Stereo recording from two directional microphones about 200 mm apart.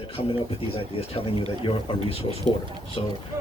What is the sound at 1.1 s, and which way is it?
Speech, 30° left (ahead or behind).